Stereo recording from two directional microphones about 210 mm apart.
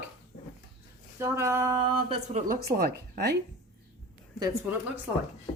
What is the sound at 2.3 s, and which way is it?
Speech, 40° right (ahead or behind).